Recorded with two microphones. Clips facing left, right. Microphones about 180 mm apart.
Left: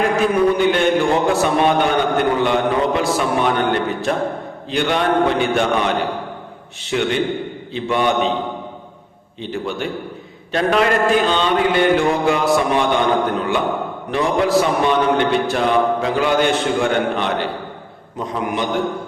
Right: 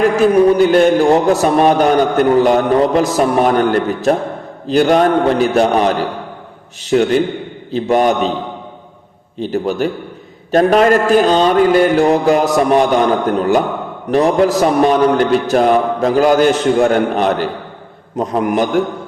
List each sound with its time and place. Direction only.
0.2 s a man's voice: 40° right (ahead or behind)
9.4 s a man's voice: 40° right (ahead or behind)